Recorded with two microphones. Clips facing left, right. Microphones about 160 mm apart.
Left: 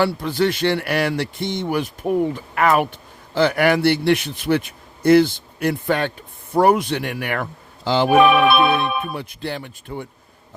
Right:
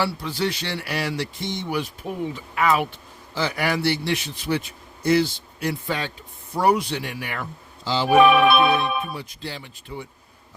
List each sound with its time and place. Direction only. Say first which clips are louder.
0.0 s a man's voice: left 6 dB; 55° left (ahead or behind)